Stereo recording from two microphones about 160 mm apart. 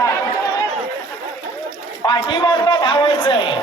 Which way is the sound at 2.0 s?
25° left (ahead or behind).